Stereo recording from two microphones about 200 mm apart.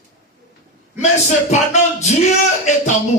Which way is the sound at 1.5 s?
35° left (ahead or behind).